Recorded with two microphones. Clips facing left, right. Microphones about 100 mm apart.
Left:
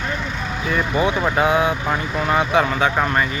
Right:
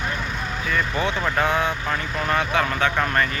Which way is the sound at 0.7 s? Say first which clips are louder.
Left 5 dB; 15° left (ahead or behind).